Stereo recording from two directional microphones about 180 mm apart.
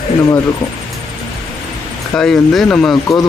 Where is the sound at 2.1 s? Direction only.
5° left (ahead or behind).